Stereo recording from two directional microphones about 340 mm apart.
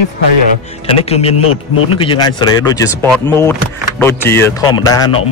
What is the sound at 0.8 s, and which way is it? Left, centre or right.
Speech, centre.